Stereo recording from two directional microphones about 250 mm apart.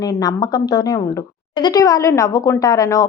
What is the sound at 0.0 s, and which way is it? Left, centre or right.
Speech, centre.